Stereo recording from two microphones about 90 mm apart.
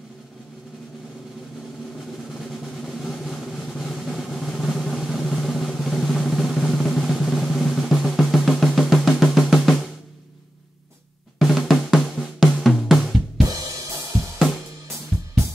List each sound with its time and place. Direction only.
2.3 s drum: centre (ahead or behind)
11.3 s drum: centre (ahead or behind)
13.5 s drum kit: 40° right (ahead or behind)